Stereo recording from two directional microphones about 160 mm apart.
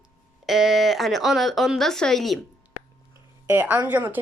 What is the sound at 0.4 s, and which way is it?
Speech, centre (ahead or behind).